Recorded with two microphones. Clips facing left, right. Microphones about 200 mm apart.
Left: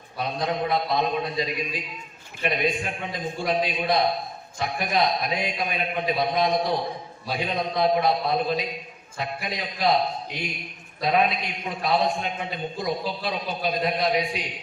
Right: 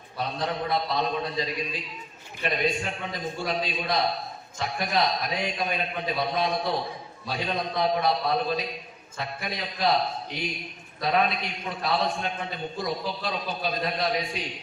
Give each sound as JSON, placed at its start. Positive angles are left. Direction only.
{"t": 0.3, "sound": "a man's voice", "side_deg": 15}
{"t": 11.0, "sound": "a man's voice", "side_deg": 15}